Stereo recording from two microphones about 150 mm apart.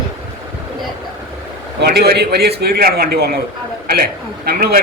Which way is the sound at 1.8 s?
90° right.